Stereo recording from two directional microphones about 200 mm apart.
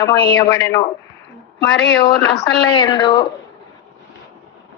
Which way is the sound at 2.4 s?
20° left (ahead or behind).